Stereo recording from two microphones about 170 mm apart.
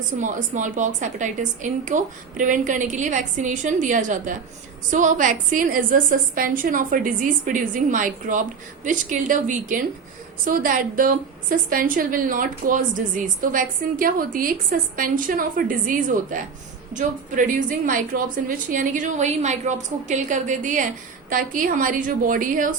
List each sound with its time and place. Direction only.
0.2 s a woman's voice: 45° right (ahead or behind)